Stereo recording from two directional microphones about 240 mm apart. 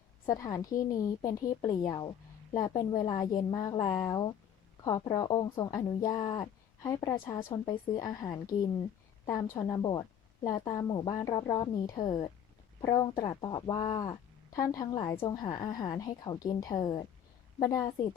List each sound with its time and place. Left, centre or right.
0.3 s a woman's voice: centre